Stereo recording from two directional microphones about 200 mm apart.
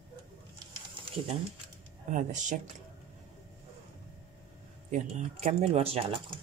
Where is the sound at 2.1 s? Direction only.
40° right (ahead or behind).